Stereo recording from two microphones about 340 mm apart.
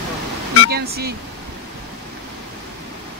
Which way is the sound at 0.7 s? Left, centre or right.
Right.